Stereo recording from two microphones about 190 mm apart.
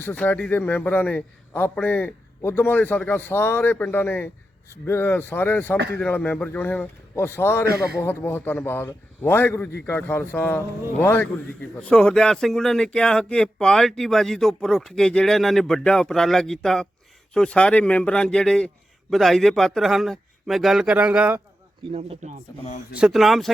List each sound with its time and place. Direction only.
0.0 s a man's voice: 10° left (ahead or behind); by 21.4 s 10° right (ahead or behind)
21.9 s speech: 35° right (ahead or behind)
22.6 s speech: 40° left (ahead or behind)
23.0 s speech: 5° right (ahead or behind)